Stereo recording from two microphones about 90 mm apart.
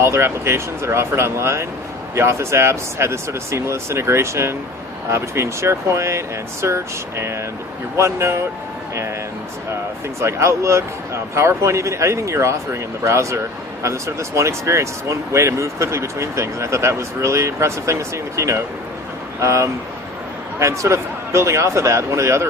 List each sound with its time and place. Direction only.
0.0 s speech: 30° right (ahead or behind)
10.2 s speech: 30° right (ahead or behind)